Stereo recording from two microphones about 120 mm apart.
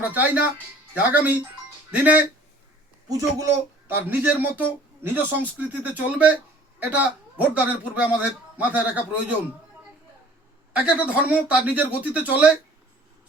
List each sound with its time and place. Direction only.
0.0 s a man's voice: 15° right (ahead or behind)
3.1 s speech: 25° right (ahead or behind)
3.8 s a man's voice: 15° right (ahead or behind)
10.8 s a man's voice: 10° right (ahead or behind)